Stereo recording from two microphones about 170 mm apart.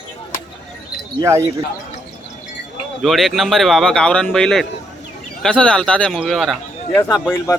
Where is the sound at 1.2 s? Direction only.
15° right (ahead or behind).